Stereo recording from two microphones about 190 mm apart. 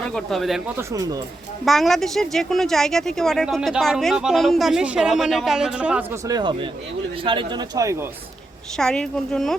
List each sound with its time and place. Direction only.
0.1 s speech: centre (ahead or behind)
0.8 s speech: 20° right (ahead or behind)
1.6 s speech: centre (ahead or behind)
6.2 s speech: 20° right (ahead or behind)
8.8 s speech: 5° left (ahead or behind)